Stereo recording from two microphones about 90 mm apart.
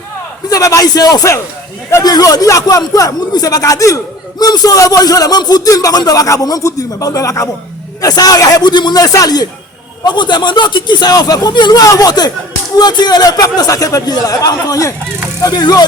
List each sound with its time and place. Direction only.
0.5 s speech: 40° left (ahead or behind)
2.0 s speech: 50° left (ahead or behind)
10.0 s speech: 55° left (ahead or behind)